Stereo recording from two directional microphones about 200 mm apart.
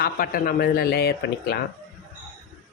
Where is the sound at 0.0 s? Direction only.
45° left (ahead or behind).